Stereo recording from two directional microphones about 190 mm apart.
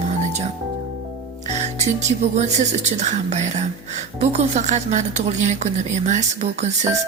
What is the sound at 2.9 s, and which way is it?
A woman's voice, 35° right (ahead or behind).